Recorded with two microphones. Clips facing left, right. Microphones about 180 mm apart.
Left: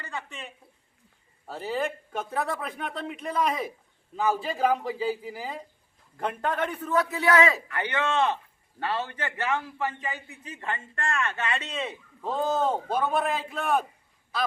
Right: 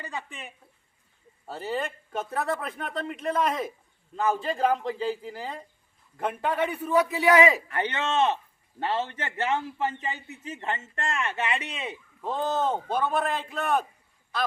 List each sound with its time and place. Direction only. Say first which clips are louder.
0.0 s speech: right 1 dB; 15° right (ahead or behind)
1.5 s a man's voice: left 1 dB; centre (ahead or behind)
12.2 s speech: left 1 dB; centre (ahead or behind)